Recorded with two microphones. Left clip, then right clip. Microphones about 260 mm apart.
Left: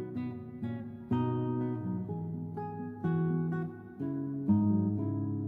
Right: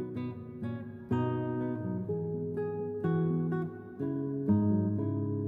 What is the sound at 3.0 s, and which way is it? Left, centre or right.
Music, right.